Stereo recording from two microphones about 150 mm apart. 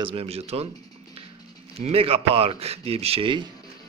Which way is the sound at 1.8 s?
40° right (ahead or behind).